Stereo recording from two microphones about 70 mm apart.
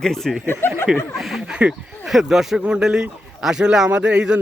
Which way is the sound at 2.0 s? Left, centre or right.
Centre.